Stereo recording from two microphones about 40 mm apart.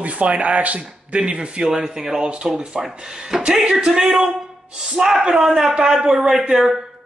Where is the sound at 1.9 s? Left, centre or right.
Centre.